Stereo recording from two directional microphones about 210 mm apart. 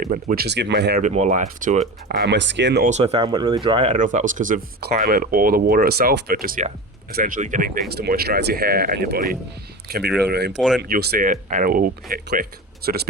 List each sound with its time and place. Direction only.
0.0 s speech: 40° right (ahead or behind)
1.0 s speech: 35° right (ahead or behind)
2.0 s speech: 50° right (ahead or behind)
2.8 s speech: 30° right (ahead or behind)
3.9 s speech: 35° right (ahead or behind)